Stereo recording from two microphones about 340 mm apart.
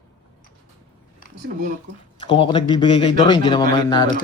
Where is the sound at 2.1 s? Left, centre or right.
Centre.